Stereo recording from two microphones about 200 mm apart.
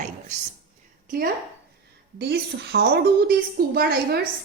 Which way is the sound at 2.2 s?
55° right (ahead or behind).